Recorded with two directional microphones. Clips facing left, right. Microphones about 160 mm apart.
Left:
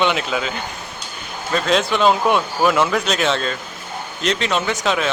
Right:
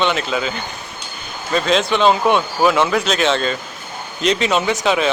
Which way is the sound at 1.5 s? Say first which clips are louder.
Right 1 dB; centre (ahead or behind).